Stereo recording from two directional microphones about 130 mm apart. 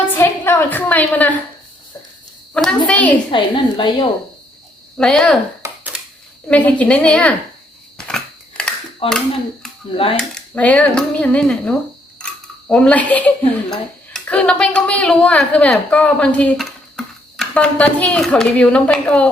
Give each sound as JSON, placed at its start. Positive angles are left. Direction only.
{"t": 0.1, "sound": "a sound", "side_deg": 15}
{"t": 2.6, "sound": "speech", "side_deg": 5}
{"t": 3.3, "sound": "a woman's voice", "side_deg": 40}
{"t": 4.9, "sound": "speech", "side_deg": 5}
{"t": 6.5, "sound": "speech", "side_deg": 10}
{"t": 7.9, "sound": "scissors", "side_deg": 5}
{"t": 9.0, "sound": "speech", "side_deg": 45}
{"t": 10.2, "sound": "speech", "side_deg": 10}
{"t": 12.2, "sound": "a sound", "side_deg": 10}
{"t": 13.7, "sound": "speech", "side_deg": 5}